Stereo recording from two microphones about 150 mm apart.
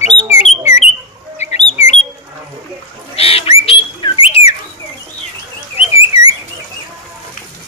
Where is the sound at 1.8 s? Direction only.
50° left (ahead or behind).